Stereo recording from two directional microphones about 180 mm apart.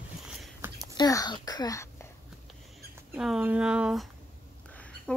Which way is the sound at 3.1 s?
5° right (ahead or behind).